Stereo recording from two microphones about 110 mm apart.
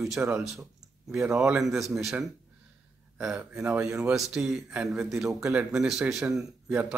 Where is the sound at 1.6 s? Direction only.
5° right (ahead or behind).